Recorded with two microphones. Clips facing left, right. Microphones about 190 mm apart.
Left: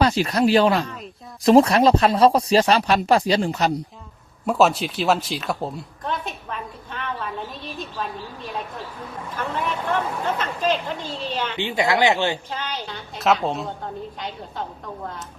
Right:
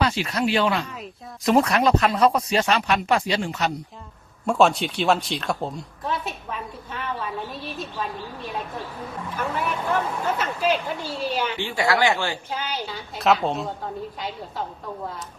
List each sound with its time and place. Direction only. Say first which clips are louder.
0.0 s speech: left 5 dB; 40° left (ahead or behind)
4.4 s a woman's voice: even; 5° left (ahead or behind)
9.3 s speech: even; 10° right (ahead or behind)
11.6 s speech: left 3 dB; 20° left (ahead or behind)
12.5 s a woman's voice: right 1 dB; 10° right (ahead or behind)